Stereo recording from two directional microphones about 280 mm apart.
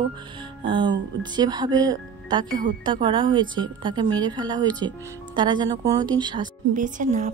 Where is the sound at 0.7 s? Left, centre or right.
Centre.